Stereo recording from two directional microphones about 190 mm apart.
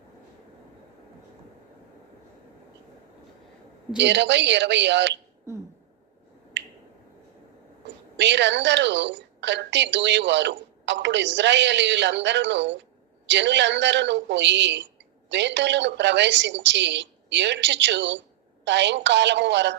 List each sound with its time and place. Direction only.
3.9 s a woman's voice: 70° right (ahead or behind)
5.5 s a sound: 15° right (ahead or behind)
6.5 s finger snapping: 70° right (ahead or behind)
8.1 s a woman's voice: 70° right (ahead or behind)